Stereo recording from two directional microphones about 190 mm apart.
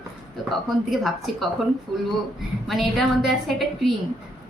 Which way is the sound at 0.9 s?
Centre (ahead or behind).